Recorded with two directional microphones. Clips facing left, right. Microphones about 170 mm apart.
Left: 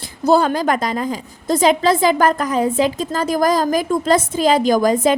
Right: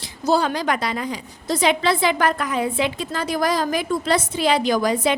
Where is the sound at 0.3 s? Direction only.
50° left (ahead or behind).